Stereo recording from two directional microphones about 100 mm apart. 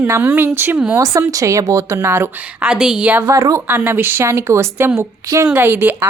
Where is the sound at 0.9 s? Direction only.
35° right (ahead or behind).